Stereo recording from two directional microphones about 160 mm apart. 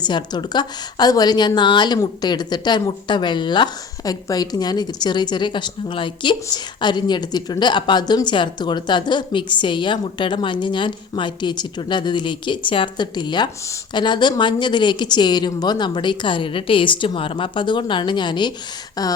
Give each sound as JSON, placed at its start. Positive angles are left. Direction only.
{"t": 0.0, "sound": "a woman's voice", "side_deg": 25}